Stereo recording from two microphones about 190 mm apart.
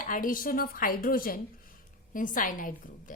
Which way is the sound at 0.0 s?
45° left (ahead or behind).